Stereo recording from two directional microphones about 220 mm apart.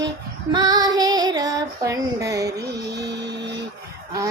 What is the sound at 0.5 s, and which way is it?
Female singing, 20° right (ahead or behind).